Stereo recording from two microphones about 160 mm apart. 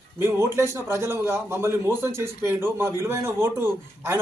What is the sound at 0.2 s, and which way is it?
A man's voice, 15° right (ahead or behind).